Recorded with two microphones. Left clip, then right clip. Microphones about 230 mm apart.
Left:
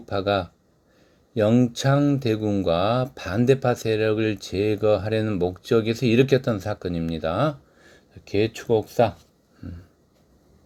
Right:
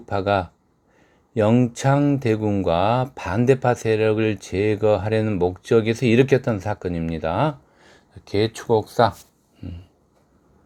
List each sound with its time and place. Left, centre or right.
1.3 s speech: centre
8.2 s speech: right